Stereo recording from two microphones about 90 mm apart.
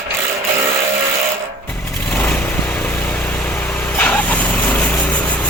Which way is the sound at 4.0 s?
15° left (ahead or behind).